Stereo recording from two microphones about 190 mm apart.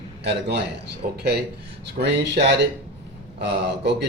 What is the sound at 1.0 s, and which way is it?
Speech, 45° right (ahead or behind).